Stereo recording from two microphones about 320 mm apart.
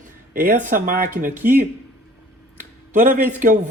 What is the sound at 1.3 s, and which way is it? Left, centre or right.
Speech, centre.